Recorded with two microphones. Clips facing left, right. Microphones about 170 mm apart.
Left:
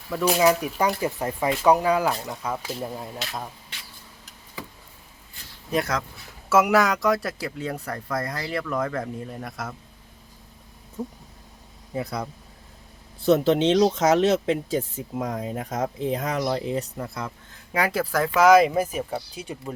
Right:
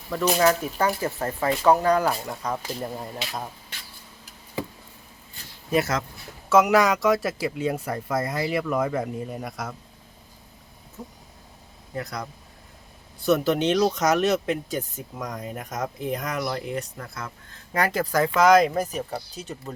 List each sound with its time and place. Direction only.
0.1 s speech: 5° left (ahead or behind)
2.0 s speech: 5° right (ahead or behind)
5.7 s speech: 5° right (ahead or behind)
7.7 s speech: 15° right (ahead or behind)
8.4 s speech: 10° right (ahead or behind)
13.2 s speech: 25° left (ahead or behind)
17.7 s speech: 5° left (ahead or behind)